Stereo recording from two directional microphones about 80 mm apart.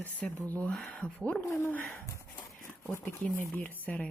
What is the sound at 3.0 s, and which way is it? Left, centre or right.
Speech, left.